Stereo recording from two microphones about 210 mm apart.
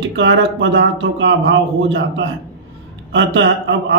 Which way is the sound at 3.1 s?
60° right (ahead or behind).